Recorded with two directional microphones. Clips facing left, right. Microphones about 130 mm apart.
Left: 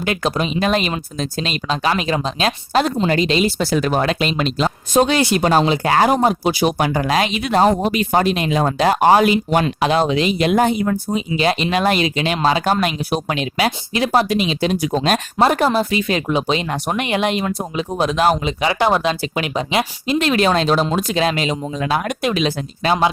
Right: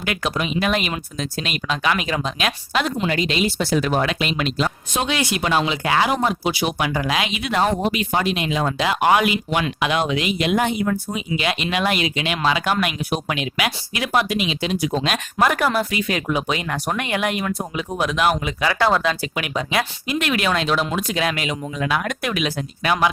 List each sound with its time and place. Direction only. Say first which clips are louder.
0.0 s speech: left 4 dB; 35° left (ahead or behind)
18.6 s speech: left 1 dB; 20° left (ahead or behind)